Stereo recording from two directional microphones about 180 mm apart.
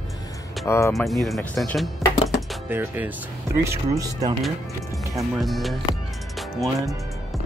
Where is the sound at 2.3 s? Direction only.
10° right (ahead or behind).